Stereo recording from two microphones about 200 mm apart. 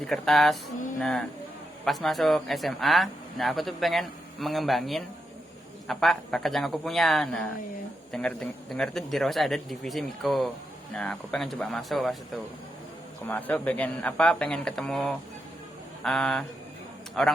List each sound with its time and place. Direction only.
0.0 s speech: centre (ahead or behind)
13.2 s speech: 10° left (ahead or behind)